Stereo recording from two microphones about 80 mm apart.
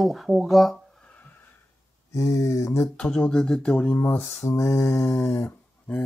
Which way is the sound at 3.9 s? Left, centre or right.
Left.